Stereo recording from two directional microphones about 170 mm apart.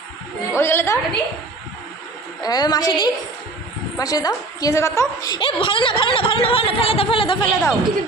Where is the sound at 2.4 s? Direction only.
25° left (ahead or behind).